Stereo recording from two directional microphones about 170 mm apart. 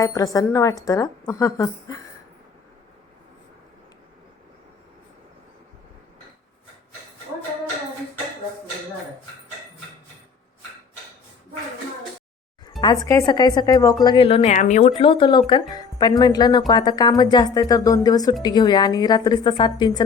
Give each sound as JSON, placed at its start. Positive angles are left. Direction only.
{"t": 0.0, "sound": "speech", "side_deg": 20}
{"t": 13.1, "sound": "speech", "side_deg": 20}
{"t": 14.5, "sound": "speech", "side_deg": 45}
{"t": 14.9, "sound": "speech", "side_deg": 30}